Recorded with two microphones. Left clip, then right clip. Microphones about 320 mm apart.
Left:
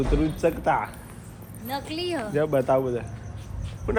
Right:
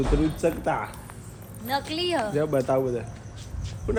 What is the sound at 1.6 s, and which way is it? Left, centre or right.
Speech, centre.